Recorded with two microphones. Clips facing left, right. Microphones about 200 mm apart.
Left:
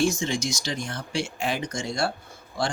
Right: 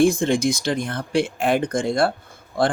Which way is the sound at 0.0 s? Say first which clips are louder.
Right 7 dB; 55° right (ahead or behind).